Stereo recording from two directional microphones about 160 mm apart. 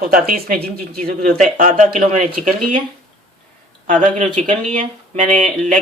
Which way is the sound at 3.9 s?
50° right (ahead or behind).